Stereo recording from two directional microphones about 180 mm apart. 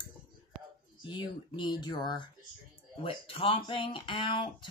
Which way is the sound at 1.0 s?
25° left (ahead or behind).